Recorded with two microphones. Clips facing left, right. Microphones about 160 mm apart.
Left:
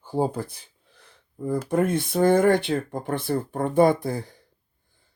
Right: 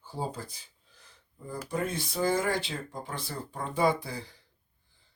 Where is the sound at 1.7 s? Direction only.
55° left (ahead or behind).